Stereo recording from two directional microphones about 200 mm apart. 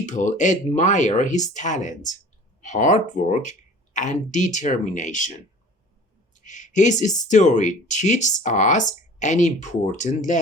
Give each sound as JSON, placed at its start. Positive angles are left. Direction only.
{"t": 0.0, "sound": "speech", "side_deg": 40}
{"t": 6.4, "sound": "a sound", "side_deg": 40}
{"t": 7.3, "sound": "speech", "side_deg": 35}